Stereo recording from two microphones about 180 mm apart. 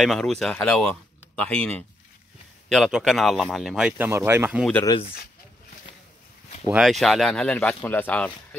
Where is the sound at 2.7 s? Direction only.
Centre (ahead or behind).